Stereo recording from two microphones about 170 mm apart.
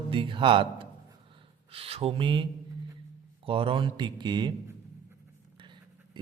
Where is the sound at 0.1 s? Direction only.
30° right (ahead or behind).